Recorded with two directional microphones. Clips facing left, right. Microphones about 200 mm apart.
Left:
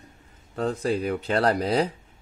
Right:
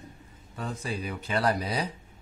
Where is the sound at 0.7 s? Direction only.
60° left (ahead or behind).